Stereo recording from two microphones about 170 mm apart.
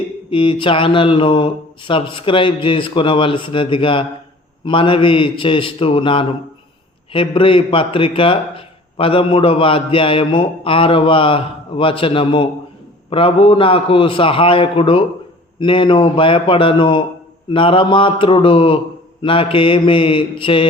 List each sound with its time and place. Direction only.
0.3 s a man's voice: 30° left (ahead or behind)